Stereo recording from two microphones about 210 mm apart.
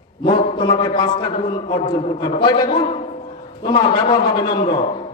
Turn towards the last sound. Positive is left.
turn(degrees=20)  # may be behind; listen again after turning